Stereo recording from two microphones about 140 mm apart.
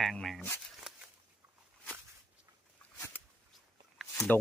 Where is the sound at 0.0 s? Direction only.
Centre (ahead or behind).